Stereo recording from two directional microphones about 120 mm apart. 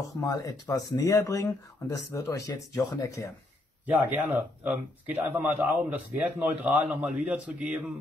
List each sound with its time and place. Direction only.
0.2 s speech: 30° left (ahead or behind)
4.1 s a man's voice: 15° right (ahead or behind)